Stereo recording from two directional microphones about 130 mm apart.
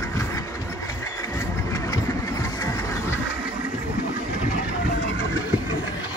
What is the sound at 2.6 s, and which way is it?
Music, 20° left (ahead or behind).